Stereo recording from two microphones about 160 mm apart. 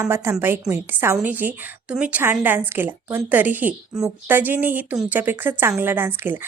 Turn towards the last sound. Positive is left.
turn(degrees=-10)  # may be behind; listen again after turning